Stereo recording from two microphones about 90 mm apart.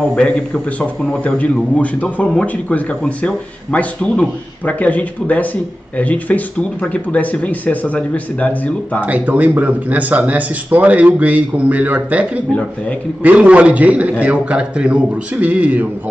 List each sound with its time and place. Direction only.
0.0 s speech: 10° left (ahead or behind)
9.0 s speech: 15° right (ahead or behind)